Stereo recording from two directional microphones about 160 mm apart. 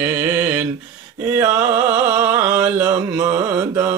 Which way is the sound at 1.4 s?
15° right (ahead or behind).